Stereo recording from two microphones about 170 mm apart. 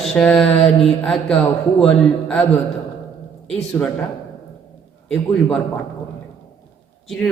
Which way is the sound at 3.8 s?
20° left (ahead or behind).